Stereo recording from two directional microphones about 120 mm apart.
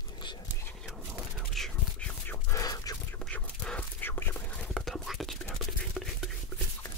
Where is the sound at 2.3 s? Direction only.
25° left (ahead or behind).